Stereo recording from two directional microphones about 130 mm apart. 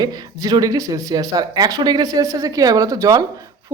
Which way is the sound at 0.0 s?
30° right (ahead or behind).